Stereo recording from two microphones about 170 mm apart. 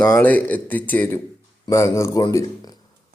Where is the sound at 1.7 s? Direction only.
15° left (ahead or behind).